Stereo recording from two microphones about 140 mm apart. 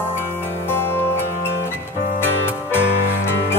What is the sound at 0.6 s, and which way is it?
Music, 15° left (ahead or behind).